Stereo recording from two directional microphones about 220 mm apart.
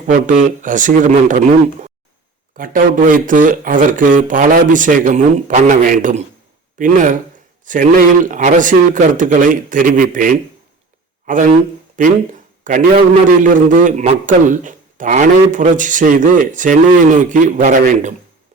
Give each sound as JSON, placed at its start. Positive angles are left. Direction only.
{"t": 0.1, "sound": "a man's voice", "side_deg": -35}
{"t": 2.6, "sound": "a man's voice", "side_deg": -40}
{"t": 11.9, "sound": "a sound", "side_deg": -35}
{"t": 13.4, "sound": "a man's voice", "side_deg": -35}